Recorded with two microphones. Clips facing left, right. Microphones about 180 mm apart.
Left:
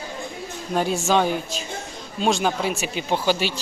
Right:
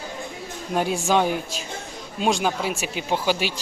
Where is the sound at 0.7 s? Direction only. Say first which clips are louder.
Left 1 dB; 10° right (ahead or behind).